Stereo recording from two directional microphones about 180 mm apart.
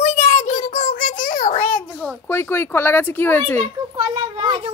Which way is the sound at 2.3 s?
10° left (ahead or behind).